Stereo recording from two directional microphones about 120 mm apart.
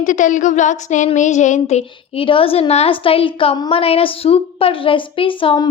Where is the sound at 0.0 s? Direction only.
90° left.